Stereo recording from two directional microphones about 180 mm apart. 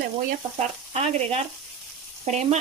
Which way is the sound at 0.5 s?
40° right (ahead or behind).